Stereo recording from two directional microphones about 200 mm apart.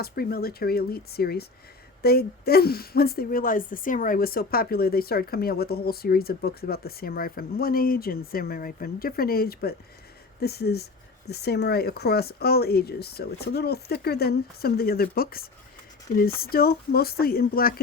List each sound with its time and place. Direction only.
0.0 s speech: 50° left (ahead or behind)